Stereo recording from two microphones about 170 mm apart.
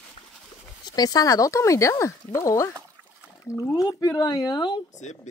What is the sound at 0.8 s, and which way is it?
Speech, 25° left (ahead or behind).